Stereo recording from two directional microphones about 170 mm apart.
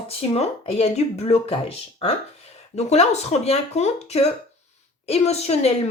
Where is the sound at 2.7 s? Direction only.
40° left (ahead or behind).